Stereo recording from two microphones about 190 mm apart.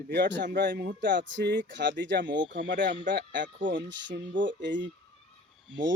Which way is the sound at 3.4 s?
45° right (ahead or behind).